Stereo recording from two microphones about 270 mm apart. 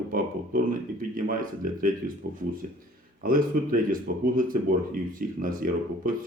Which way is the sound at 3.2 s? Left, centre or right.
Right.